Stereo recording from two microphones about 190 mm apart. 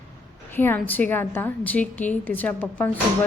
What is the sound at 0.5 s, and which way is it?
A woman's voice, 10° left (ahead or behind).